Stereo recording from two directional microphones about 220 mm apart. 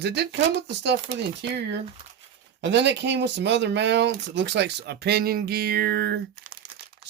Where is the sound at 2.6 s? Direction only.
50° right (ahead or behind).